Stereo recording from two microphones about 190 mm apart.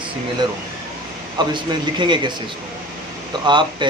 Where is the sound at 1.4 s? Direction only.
25° right (ahead or behind).